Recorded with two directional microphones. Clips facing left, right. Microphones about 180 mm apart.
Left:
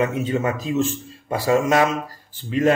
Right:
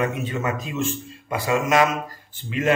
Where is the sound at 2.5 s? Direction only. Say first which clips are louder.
Left 3 dB; 35° left (ahead or behind).